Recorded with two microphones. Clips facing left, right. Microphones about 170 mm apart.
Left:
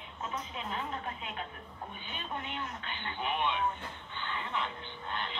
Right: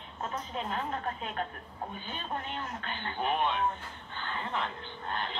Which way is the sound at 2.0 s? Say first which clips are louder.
Right 1 dB; 40° right (ahead or behind).